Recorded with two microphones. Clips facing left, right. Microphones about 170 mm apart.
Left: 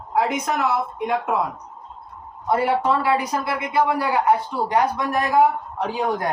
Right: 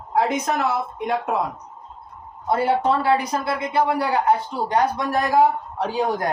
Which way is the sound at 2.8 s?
30° right (ahead or behind).